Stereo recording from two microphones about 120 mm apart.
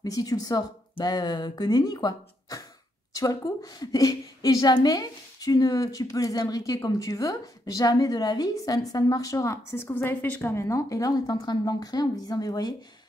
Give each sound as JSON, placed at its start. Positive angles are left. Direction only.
{"t": 0.0, "sound": "a woman's voice", "side_deg": 30}